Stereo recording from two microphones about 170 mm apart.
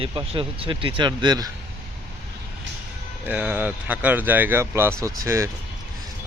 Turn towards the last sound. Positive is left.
turn(degrees=-20)  # may be behind; listen again after turning